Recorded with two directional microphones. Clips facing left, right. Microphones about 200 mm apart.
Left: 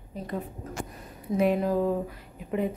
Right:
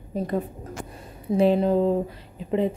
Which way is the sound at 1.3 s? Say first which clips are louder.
Right 5 dB; 30° right (ahead or behind).